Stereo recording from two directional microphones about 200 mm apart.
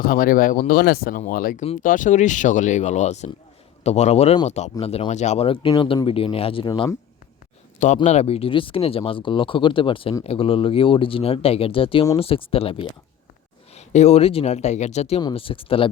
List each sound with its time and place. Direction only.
0.0 s speech: 45° left (ahead or behind); by 6.9 s 25° left (ahead or behind)
8.0 s speech: 35° left (ahead or behind)